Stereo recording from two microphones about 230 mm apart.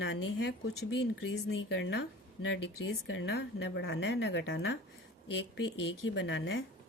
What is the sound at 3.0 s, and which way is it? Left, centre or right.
Speech, left.